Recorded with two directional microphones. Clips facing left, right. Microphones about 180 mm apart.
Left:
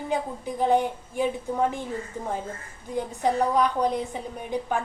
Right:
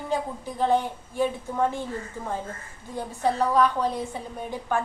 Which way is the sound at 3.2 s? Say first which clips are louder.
Right 1 dB; 15° left (ahead or behind).